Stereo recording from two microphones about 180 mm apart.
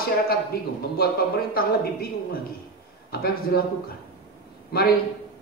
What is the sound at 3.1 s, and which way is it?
Speech, 60° left (ahead or behind).